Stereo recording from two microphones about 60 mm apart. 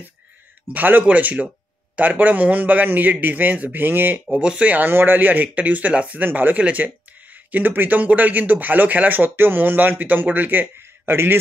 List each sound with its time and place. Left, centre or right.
0.7 s speech: right
4.4 s speech: centre; by 11.3 s right